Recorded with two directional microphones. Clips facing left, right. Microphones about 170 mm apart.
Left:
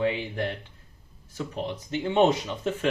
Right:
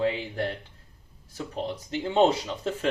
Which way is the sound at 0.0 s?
35° right (ahead or behind).